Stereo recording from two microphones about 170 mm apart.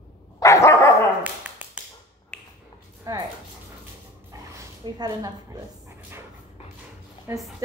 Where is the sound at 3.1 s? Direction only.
20° right (ahead or behind).